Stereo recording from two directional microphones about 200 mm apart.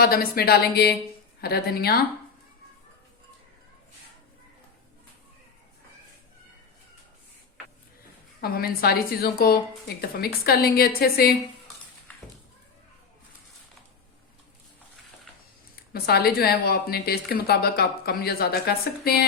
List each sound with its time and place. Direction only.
0.0 s speech: 50° left (ahead or behind)
8.4 s speech: 50° left (ahead or behind)
12.1 s cat: 10° left (ahead or behind)
15.7 s speech: 50° left (ahead or behind)